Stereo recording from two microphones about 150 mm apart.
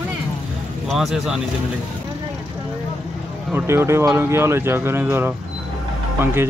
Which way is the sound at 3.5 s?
15° right (ahead or behind).